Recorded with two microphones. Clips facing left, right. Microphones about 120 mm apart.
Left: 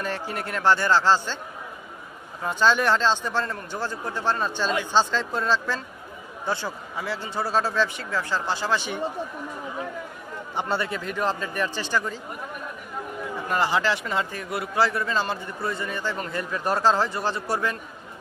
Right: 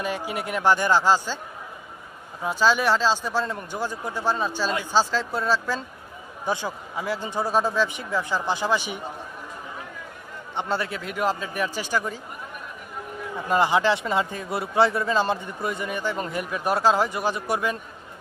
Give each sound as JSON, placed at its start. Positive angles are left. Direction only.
{"t": 0.0, "sound": "speech", "side_deg": -10}
{"t": 2.4, "sound": "speech", "side_deg": -5}
{"t": 10.5, "sound": "speech", "side_deg": 0}
{"t": 13.5, "sound": "speech", "side_deg": -20}